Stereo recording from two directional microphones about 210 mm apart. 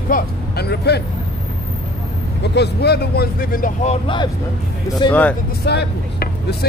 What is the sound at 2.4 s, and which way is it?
Speech, 55° left (ahead or behind).